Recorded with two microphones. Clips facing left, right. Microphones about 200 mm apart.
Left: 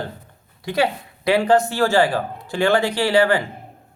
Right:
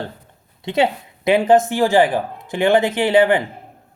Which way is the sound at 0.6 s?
25° right (ahead or behind).